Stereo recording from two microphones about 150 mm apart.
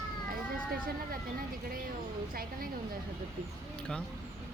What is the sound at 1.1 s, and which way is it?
A woman's voice, 70° right (ahead or behind).